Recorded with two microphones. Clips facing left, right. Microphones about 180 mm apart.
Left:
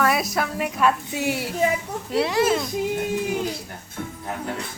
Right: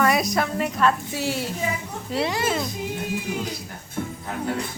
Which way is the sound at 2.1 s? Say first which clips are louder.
Left 4 dB; centre (ahead or behind).